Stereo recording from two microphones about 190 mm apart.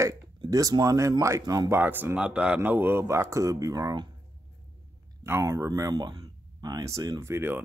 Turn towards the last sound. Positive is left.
turn(degrees=-15)  # may be behind; listen again after turning